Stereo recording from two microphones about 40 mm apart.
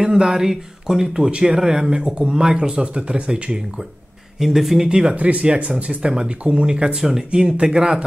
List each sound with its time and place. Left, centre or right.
0.0 s speech: right
4.4 s speech: centre
4.8 s speech: right
5.1 s speech: right